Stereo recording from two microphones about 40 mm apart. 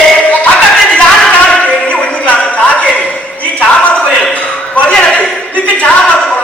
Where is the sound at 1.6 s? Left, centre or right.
Left.